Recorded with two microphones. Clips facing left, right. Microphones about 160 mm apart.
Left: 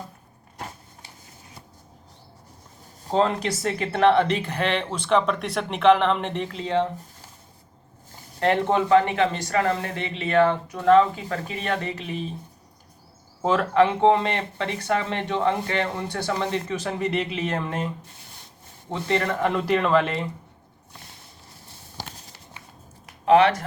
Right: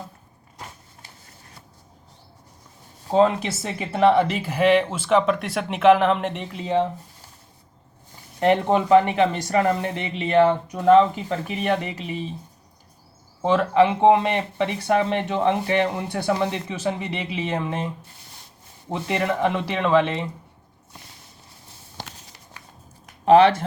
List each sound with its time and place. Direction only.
3.1 s speech: 5° right (ahead or behind)
8.4 s speech: 15° right (ahead or behind)
13.4 s speech: centre (ahead or behind)
18.9 s speech: 10° right (ahead or behind)
19.4 s speech: centre (ahead or behind)
23.2 s speech: 30° right (ahead or behind)